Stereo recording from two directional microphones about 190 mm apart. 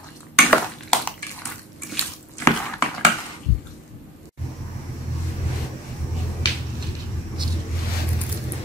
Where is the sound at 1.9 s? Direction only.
15° left (ahead or behind).